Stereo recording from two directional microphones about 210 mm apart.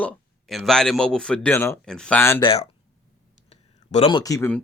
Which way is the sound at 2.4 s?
30° left (ahead or behind).